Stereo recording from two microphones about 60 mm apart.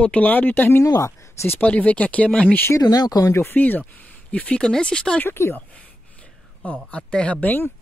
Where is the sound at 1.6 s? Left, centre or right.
Left.